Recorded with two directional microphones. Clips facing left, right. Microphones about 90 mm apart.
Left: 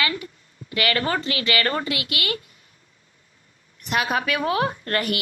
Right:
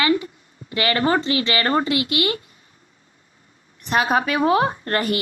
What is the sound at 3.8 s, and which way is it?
A woman's voice, 30° right (ahead or behind).